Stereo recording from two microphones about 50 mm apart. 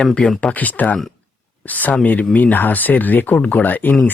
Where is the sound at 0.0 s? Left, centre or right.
Centre.